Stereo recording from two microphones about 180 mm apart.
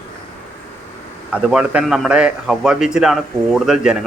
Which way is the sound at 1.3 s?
5° right (ahead or behind).